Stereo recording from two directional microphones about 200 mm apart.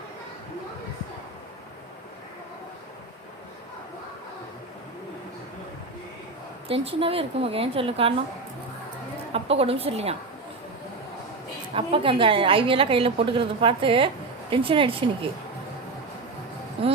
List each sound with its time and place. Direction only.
6.7 s a woman's voice: 30° right (ahead or behind)
9.3 s a woman's voice: 30° right (ahead or behind)
11.7 s a woman's voice: 25° right (ahead or behind)